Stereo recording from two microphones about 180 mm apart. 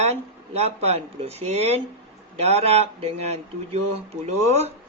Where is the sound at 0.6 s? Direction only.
35° right (ahead or behind).